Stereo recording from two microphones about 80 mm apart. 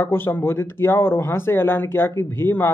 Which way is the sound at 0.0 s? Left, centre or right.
Left.